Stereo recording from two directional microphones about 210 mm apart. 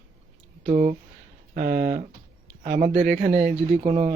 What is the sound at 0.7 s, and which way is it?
Speech, 35° right (ahead or behind).